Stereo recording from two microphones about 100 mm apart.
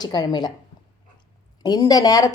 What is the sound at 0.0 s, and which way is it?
Speech, 40° left (ahead or behind).